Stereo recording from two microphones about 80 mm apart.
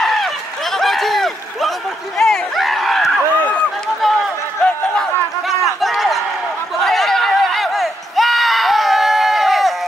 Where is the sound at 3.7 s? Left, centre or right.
Centre.